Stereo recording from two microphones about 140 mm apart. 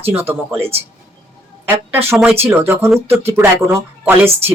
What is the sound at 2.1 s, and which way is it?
Speech, 10° right (ahead or behind).